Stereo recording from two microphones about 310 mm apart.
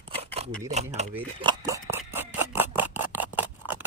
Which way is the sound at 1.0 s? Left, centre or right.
Right.